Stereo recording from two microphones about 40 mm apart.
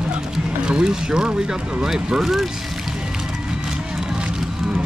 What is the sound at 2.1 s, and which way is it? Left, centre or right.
Speech, centre.